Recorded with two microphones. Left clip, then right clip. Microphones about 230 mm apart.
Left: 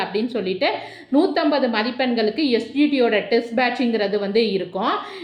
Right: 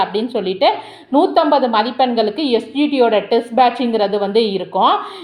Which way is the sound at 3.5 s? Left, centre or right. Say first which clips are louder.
Right 7 dB; right.